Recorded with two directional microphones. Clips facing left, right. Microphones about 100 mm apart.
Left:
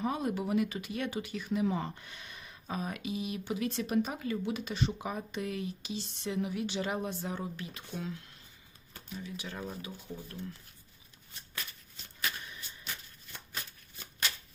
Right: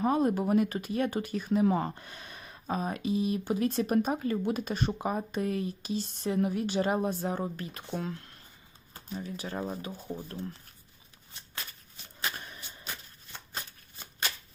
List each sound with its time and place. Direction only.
0.0 s speech: 45° right (ahead or behind)
8.9 s speech: 35° right (ahead or behind)